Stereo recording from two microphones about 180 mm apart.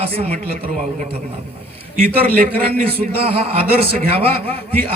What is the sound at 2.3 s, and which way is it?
Speech, 55° right (ahead or behind).